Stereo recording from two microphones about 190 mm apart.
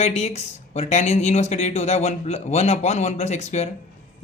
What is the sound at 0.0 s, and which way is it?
Speech, 35° left (ahead or behind).